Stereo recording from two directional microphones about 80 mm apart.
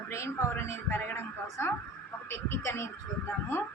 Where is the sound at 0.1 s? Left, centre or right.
Left.